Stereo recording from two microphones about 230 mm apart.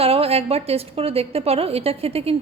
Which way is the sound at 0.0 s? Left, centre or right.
Right.